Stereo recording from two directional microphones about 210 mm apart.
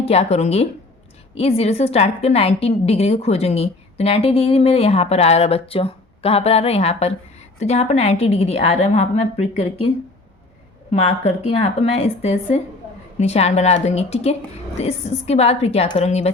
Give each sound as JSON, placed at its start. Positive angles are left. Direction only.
{"t": 0.0, "sound": "a woman's voice", "side_deg": 30}
{"t": 10.9, "sound": "a woman's voice", "side_deg": 30}